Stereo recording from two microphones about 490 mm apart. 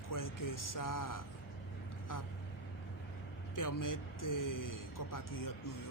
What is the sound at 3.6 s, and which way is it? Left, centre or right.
Speech, left.